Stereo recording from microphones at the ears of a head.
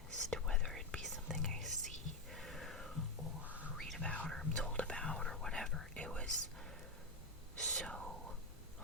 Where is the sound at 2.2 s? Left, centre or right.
Centre.